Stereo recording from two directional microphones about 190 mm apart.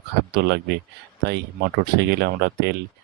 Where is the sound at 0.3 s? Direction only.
60° right (ahead or behind).